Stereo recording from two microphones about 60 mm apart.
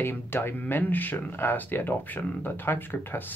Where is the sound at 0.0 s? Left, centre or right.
Left.